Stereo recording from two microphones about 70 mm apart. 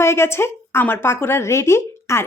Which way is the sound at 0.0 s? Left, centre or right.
Left.